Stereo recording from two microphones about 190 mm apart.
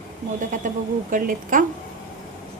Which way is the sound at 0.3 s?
45° right (ahead or behind).